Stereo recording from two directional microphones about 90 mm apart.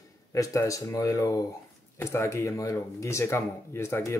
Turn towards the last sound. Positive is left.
turn(degrees=30)  # may be behind; listen again after turning